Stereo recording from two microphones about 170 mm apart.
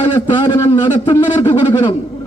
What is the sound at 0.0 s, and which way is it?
A man's voice, 30° left (ahead or behind).